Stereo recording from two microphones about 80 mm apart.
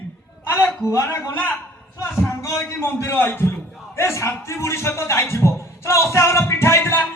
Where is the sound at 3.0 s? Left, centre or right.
Left.